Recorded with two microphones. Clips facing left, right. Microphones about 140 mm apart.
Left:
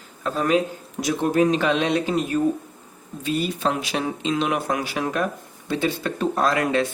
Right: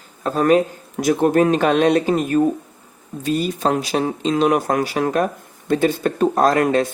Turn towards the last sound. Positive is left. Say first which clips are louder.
# right 5 dB
turn(degrees=-45)  # may be behind; listen again after turning